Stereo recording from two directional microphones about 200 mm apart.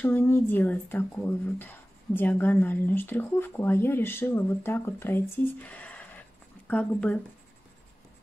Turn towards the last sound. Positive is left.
turn(degrees=5)  # may be behind; listen again after turning